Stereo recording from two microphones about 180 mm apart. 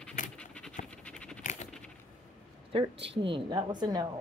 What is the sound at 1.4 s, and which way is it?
Patter, 40° left (ahead or behind).